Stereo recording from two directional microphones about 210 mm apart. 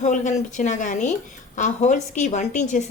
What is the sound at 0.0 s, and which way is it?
A woman's voice, 35° left (ahead or behind).